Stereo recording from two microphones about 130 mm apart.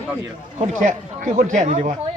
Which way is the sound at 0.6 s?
70° right (ahead or behind).